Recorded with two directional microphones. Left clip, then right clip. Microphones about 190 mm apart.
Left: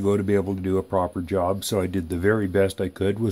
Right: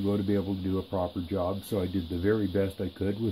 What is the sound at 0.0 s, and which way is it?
Speech, 60° left (ahead or behind).